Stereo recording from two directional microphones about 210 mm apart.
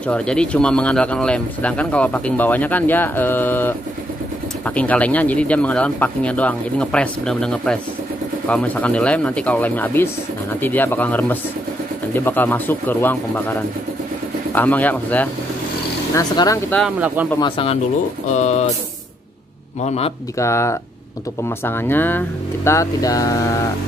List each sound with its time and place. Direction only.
0.0 s speech: 5° left (ahead or behind)
16.7 s speech: 5° right (ahead or behind)
17.4 s speech: 25° left (ahead or behind)
18.3 s music: 30° left (ahead or behind)
19.8 s music: 30° left (ahead or behind)
20.3 s speech: 15° left (ahead or behind)